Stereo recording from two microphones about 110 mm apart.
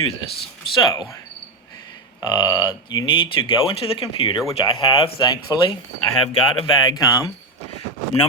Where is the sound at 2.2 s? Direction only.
40° left (ahead or behind).